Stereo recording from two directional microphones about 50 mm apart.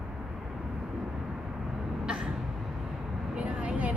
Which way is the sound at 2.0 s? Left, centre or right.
Centre.